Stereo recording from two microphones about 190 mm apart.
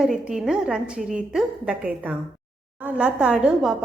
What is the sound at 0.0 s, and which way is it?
A woman's voice, 5° right (ahead or behind).